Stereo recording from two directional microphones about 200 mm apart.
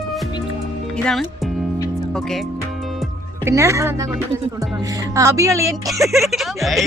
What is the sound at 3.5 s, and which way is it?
Speech, 15° right (ahead or behind).